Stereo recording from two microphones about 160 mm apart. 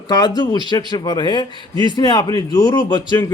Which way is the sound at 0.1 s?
25° left (ahead or behind).